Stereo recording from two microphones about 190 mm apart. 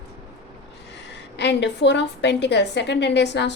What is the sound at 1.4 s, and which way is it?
A woman's voice, 65° left (ahead or behind).